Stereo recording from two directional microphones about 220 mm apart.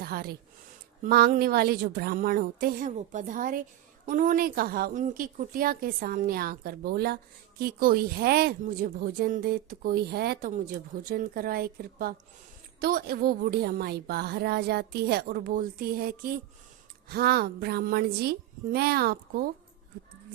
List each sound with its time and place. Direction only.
0.0 s a woman's voice: 45° right (ahead or behind)